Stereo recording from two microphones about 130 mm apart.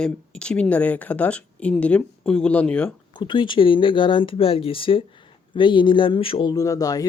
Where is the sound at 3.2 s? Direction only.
35° left (ahead or behind).